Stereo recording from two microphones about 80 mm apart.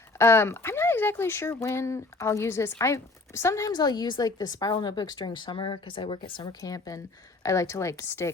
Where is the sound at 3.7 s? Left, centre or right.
Left.